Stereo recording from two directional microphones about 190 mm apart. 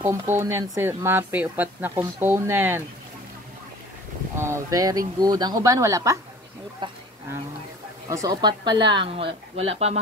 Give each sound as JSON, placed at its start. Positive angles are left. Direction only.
{"t": 0.1, "sound": "speech", "side_deg": -15}
{"t": 4.4, "sound": "a woman's voice", "side_deg": -15}
{"t": 8.1, "sound": "a woman's voice", "side_deg": -20}